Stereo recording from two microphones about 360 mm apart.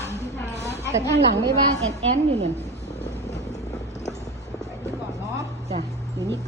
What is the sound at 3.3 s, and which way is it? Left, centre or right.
Vehicle, centre.